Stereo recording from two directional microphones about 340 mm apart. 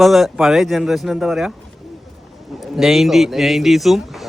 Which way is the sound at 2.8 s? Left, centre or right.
Centre.